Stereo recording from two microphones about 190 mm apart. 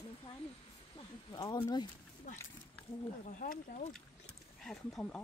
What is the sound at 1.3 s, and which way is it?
Speech, 20° left (ahead or behind).